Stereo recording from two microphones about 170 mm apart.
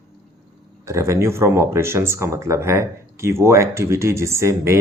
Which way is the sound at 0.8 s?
15° right (ahead or behind).